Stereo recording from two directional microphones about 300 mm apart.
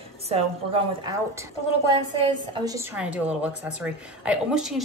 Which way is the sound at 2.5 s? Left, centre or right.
Centre.